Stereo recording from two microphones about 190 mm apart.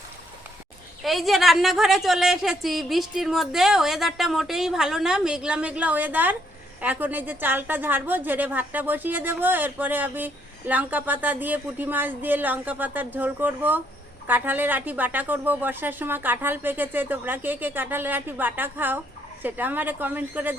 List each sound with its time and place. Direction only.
1.0 s a woman's voice: centre (ahead or behind)